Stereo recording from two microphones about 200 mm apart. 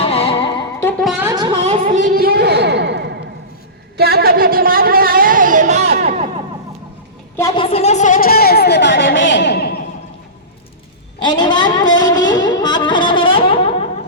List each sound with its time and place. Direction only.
0.0 s music: 30° left (ahead or behind)
0.8 s music: 10° left (ahead or behind)
1.0 s music: 5° right (ahead or behind)
1.3 s music: 20° right (ahead or behind)
1.6 s a sound: 35° right (ahead or behind)
7.3 s a sound: 20° left (ahead or behind); by 9.8 s 50° left (ahead or behind)
11.2 s music: 20° left (ahead or behind)